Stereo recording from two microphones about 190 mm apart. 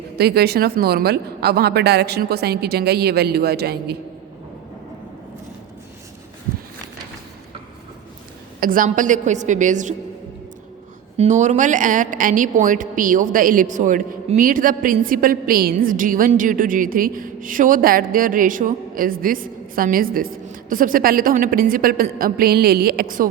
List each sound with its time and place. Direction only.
0.2 s speech: 55° right (ahead or behind)
8.6 s a woman's voice: 45° right (ahead or behind)
11.2 s a woman's voice: 40° right (ahead or behind)